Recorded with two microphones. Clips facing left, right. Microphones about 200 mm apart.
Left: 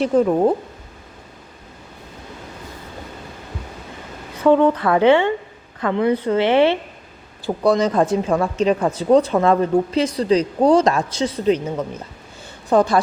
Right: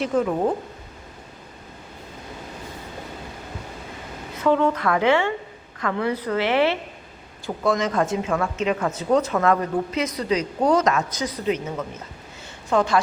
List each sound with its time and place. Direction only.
0.0 s speech: 35° left (ahead or behind)
4.4 s a woman's voice: 30° left (ahead or behind)